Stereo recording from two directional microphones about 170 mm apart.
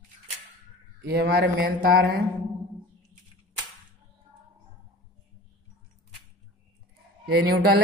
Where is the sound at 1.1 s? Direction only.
65° right (ahead or behind).